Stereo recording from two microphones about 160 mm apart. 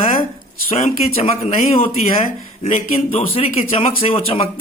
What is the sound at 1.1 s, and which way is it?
Speech, 40° left (ahead or behind).